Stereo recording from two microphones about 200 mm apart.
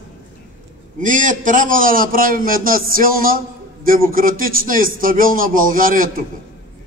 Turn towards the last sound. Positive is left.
turn(degrees=-45)  # may be behind; listen again after turning